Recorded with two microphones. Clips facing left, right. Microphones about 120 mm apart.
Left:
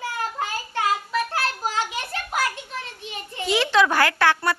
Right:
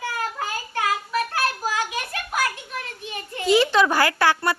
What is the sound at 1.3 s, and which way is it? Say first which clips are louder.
Children playing: right 1 dB; 25° left (ahead or behind).